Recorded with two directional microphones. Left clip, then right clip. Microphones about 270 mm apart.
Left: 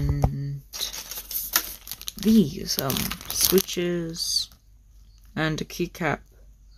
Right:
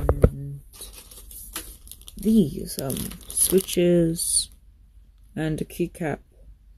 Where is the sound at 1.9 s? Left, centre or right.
Left.